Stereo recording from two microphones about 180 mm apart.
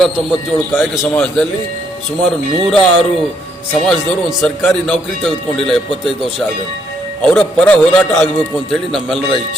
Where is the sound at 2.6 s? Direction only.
5° left (ahead or behind).